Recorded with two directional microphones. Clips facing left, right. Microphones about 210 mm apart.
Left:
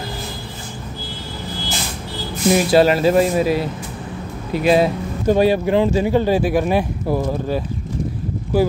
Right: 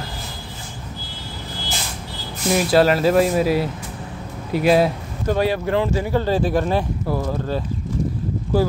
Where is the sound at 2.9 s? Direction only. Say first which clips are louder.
Left 1 dB; 5° right (ahead or behind).